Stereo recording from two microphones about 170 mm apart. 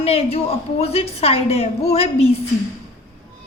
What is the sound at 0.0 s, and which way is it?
A woman's voice, 35° left (ahead or behind).